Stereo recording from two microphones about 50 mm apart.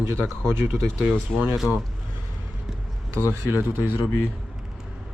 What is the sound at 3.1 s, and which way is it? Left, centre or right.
Speech, right.